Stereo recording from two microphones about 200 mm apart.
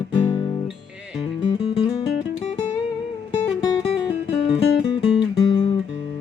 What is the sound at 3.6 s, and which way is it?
Music, 20° left (ahead or behind).